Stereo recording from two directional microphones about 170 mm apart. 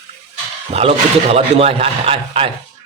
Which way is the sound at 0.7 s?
35° right (ahead or behind).